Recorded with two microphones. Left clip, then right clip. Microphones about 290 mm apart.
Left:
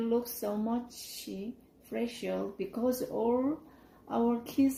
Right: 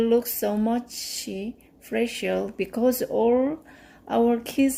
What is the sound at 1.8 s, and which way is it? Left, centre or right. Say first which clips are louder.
Speech: right 10 dB; right.